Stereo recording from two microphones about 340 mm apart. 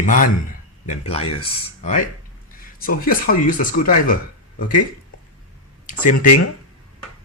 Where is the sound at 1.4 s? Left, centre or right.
Centre.